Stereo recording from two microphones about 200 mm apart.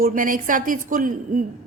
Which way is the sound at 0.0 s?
45° right (ahead or behind).